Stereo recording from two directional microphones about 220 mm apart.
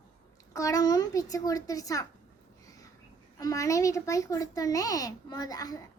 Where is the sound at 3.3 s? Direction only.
15° left (ahead or behind).